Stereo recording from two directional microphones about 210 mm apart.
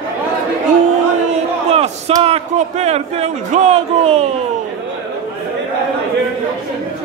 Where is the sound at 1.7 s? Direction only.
30° right (ahead or behind).